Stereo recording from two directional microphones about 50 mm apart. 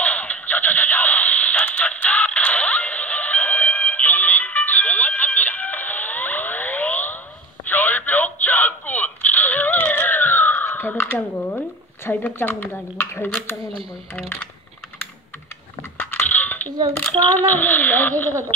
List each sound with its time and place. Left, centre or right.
0.0 s radio: left
4.5 s music: left
7.6 s a sound: left
12.9 s speech: left
14.1 s speech: left
16.0 s coin: left
17.2 s a child's voice: left